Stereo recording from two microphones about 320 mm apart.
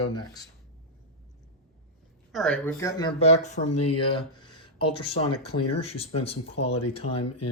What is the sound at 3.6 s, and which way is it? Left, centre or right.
Speech, left.